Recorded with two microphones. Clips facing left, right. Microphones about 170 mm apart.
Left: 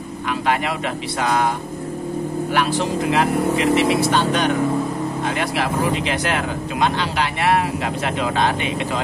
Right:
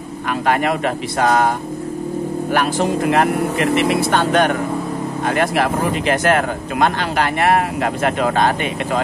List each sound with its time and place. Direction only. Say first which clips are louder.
0.3 s speech: right 4 dB; 50° right (ahead or behind)
2.5 s speech: right 3 dB; 50° right (ahead or behind)